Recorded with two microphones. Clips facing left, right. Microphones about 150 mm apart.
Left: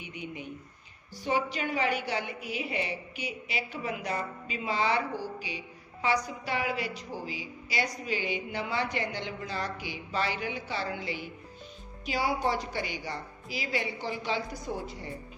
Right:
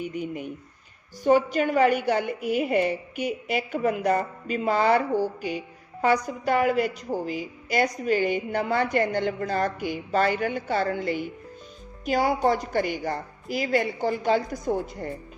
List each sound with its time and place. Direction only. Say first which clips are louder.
0.0 s a woman's voice: right 9 dB; 45° right (ahead or behind)